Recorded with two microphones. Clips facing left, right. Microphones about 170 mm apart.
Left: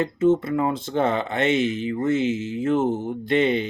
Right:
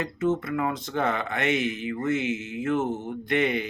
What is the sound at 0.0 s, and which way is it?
Speech, 30° left (ahead or behind).